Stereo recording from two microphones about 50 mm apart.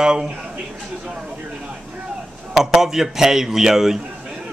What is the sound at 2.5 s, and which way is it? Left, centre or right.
A man's voice, centre.